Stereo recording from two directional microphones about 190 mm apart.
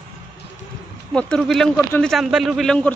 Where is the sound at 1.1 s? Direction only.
5° left (ahead or behind).